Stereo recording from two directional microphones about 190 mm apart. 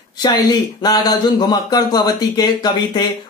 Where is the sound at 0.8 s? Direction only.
20° left (ahead or behind).